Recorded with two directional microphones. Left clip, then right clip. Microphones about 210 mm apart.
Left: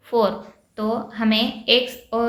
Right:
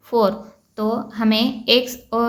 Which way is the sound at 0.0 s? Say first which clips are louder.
Right 2 dB; 40° right (ahead or behind).